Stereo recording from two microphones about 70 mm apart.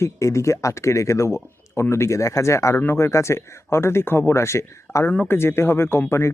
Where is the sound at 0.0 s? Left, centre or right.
Left.